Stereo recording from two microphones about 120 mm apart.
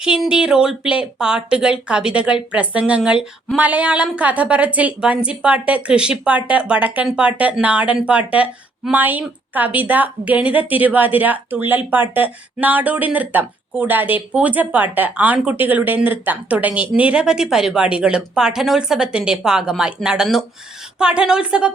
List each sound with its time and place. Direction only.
0.0 s a woman's voice: 5° right (ahead or behind)